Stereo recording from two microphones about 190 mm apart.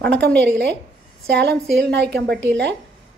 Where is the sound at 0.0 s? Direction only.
60° right (ahead or behind).